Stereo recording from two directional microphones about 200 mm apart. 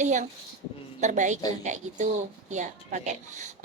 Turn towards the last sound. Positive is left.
turn(degrees=-35)  # may be behind; listen again after turning